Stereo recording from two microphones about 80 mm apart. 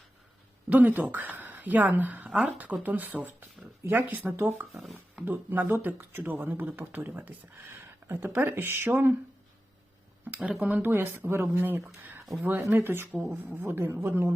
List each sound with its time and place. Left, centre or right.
0.7 s speech: right
4.7 s speech: centre
5.2 s speech: right
10.5 s speech: centre
13.1 s speech: centre
13.3 s speech: right